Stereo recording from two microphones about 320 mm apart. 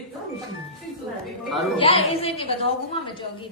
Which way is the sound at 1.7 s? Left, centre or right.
Centre.